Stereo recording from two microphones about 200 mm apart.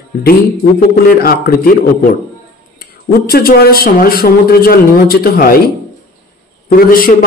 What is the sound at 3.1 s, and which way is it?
Speech, 50° left (ahead or behind).